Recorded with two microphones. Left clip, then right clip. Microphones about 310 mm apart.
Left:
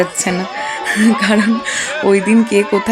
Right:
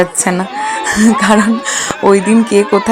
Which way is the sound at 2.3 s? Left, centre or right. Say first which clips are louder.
Right 2 dB; right.